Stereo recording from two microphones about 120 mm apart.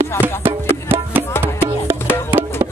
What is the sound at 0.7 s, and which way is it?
Music, 20° right (ahead or behind).